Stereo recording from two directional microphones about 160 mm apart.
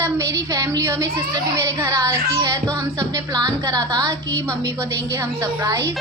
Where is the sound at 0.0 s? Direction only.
20° right (ahead or behind).